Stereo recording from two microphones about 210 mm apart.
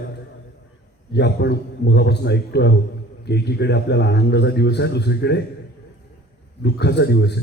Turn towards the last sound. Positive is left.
turn(degrees=55)  # may be behind; listen again after turning